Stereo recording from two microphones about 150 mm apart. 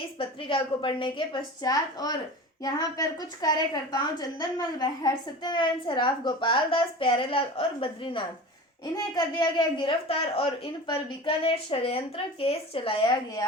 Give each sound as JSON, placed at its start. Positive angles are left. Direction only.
{"t": 0.2, "sound": "a woman's voice", "side_deg": 35}